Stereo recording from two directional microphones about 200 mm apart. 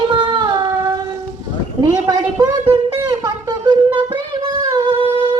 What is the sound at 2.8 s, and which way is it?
Music, 20° right (ahead or behind).